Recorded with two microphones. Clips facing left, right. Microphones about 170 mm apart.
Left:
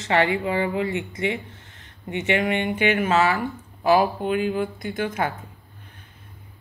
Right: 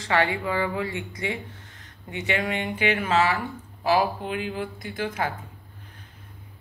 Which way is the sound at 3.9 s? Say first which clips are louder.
Left 4 dB; 25° left (ahead or behind).